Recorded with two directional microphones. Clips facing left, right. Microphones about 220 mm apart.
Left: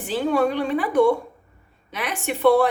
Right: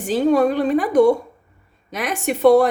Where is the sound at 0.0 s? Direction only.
40° right (ahead or behind).